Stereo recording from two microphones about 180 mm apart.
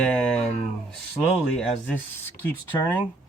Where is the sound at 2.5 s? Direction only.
10° left (ahead or behind).